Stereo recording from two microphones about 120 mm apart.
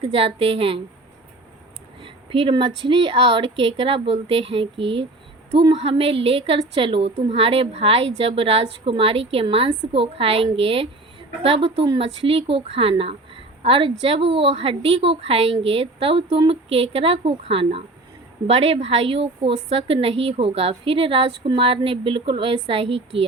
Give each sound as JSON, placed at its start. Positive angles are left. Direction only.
{"t": 0.0, "sound": "a woman's voice", "side_deg": -55}
{"t": 2.3, "sound": "a woman's voice", "side_deg": -50}